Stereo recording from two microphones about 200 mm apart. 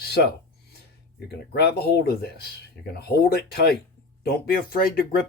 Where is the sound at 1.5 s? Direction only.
55° left (ahead or behind).